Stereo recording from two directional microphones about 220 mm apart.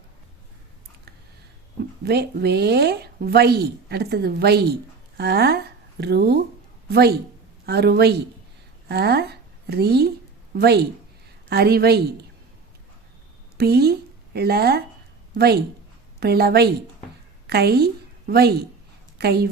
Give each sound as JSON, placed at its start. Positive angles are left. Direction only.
{"t": 2.0, "sound": "speech", "side_deg": -45}
{"t": 7.6, "sound": "a woman's voice", "side_deg": -45}
{"t": 13.6, "sound": "speech", "side_deg": -45}
{"t": 16.2, "sound": "a woman's voice", "side_deg": -45}